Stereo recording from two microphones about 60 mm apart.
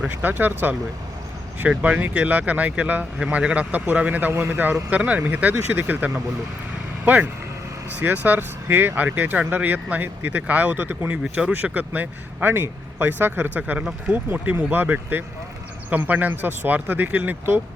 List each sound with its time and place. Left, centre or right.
0.1 s speech: right
1.8 s speech: right
11.2 s speech: centre
11.5 s speech: right
13.6 s speech: right